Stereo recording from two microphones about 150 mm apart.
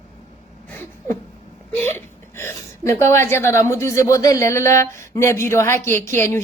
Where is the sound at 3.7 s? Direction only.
20° left (ahead or behind).